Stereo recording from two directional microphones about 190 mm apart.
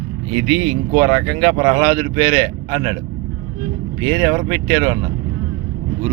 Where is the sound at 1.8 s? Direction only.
5° right (ahead or behind).